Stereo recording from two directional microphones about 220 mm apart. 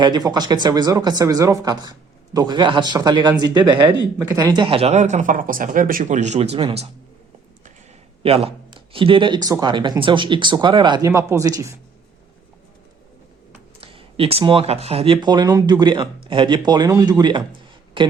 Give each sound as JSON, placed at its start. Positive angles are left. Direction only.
{"t": 0.0, "sound": "speech", "side_deg": -20}
{"t": 8.2, "sound": "speech", "side_deg": -25}
{"t": 13.8, "sound": "speech", "side_deg": -25}